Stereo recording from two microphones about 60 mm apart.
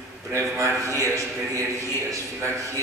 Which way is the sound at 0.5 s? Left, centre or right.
Right.